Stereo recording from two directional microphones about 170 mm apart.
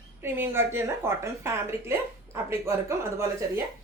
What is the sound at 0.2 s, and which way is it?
A woman's voice, 15° right (ahead or behind).